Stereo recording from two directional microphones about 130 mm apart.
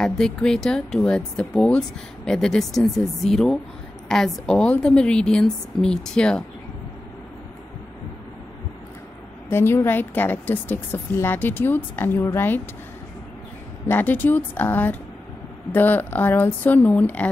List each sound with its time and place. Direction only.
0.0 s a woman's voice: 5° left (ahead or behind)
9.5 s a woman's voice: 20° left (ahead or behind)
13.8 s a woman's voice: 15° left (ahead or behind)